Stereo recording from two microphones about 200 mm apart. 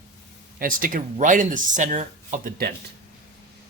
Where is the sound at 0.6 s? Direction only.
45° right (ahead or behind).